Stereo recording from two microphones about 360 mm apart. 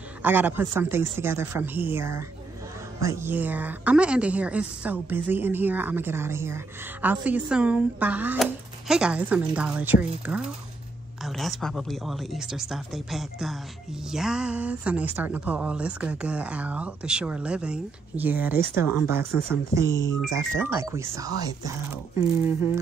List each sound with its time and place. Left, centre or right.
0.2 s a woman's voice: centre
20.0 s speech: centre
20.3 s speech: centre